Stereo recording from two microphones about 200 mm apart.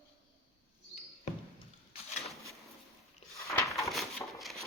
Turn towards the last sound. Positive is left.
turn(degrees=0)  # may be behind; listen again after turning